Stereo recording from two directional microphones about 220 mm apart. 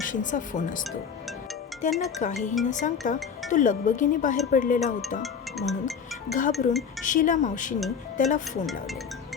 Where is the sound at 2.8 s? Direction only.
35° left (ahead or behind).